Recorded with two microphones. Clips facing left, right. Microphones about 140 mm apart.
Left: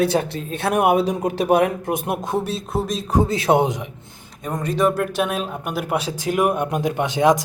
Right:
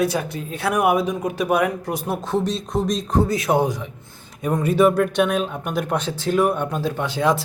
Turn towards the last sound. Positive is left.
turn(degrees=20)  # may be behind; listen again after turning